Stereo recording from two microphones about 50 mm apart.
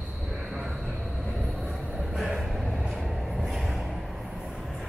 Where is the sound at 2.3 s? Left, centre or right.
Centre.